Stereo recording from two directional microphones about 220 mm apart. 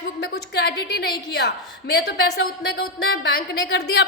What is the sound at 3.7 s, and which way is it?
Speech, 50° left (ahead or behind).